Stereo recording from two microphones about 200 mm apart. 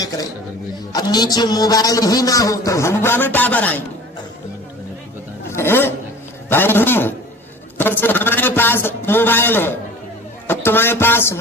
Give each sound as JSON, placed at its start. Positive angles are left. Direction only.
{"t": 0.9, "sound": "a man's voice", "side_deg": 20}
{"t": 5.5, "sound": "a man's voice", "side_deg": 10}
{"t": 10.4, "sound": "a sound", "side_deg": 10}